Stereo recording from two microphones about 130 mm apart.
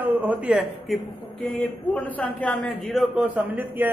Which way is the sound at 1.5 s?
10° left (ahead or behind).